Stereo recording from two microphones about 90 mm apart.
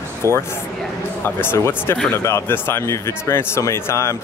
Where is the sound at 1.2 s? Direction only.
25° left (ahead or behind).